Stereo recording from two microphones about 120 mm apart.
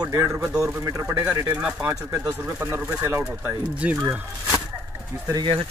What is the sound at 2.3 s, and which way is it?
Speech, 25° right (ahead or behind).